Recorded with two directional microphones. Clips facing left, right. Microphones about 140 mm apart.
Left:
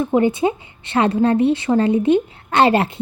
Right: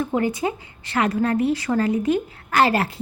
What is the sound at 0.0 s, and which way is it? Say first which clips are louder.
A woman's voice: left 6 dB; 25° left (ahead or behind).